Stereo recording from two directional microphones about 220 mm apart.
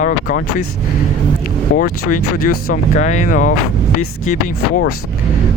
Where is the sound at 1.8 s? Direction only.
40° left (ahead or behind).